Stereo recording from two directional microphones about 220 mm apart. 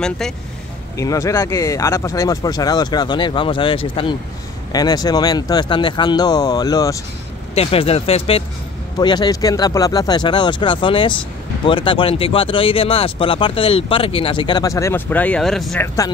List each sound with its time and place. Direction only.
0.2 s speech: centre (ahead or behind)
0.9 s speech: 15° left (ahead or behind)
7.5 s speech: 25° left (ahead or behind); by 15.9 s centre (ahead or behind)